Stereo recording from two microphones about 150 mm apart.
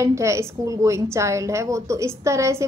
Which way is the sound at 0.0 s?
20° right (ahead or behind).